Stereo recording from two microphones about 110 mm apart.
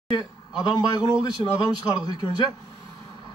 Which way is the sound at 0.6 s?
40° left (ahead or behind).